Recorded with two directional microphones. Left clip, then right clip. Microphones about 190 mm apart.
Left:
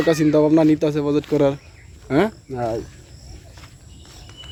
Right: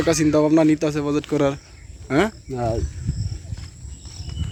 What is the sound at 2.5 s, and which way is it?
Speech, 50° right (ahead or behind).